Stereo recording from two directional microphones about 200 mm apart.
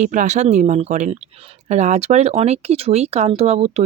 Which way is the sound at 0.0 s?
35° right (ahead or behind).